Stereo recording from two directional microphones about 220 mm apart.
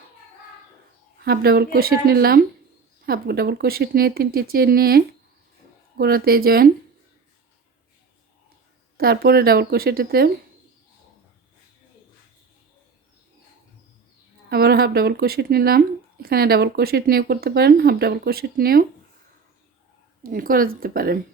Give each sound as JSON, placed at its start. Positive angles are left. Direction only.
{"t": 1.2, "sound": "speech", "side_deg": -45}
{"t": 9.0, "sound": "speech", "side_deg": -45}
{"t": 14.5, "sound": "speech", "side_deg": -45}
{"t": 20.3, "sound": "speech", "side_deg": -40}